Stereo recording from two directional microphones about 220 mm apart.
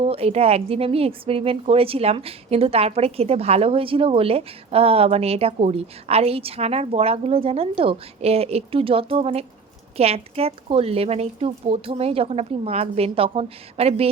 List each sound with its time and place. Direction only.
0.0 s a woman's voice: 30° right (ahead or behind)